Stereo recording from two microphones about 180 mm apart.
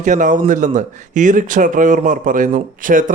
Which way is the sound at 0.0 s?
45° right (ahead or behind).